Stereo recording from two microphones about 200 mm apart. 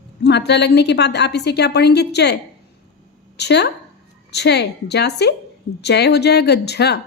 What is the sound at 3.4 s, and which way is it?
A woman's voice, 55° left (ahead or behind).